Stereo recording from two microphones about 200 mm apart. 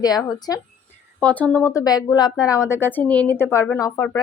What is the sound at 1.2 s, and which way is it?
A woman's voice, 5° left (ahead or behind).